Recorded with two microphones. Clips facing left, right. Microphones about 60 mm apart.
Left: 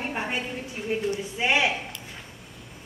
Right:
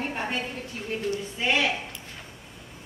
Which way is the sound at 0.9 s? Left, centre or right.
Centre.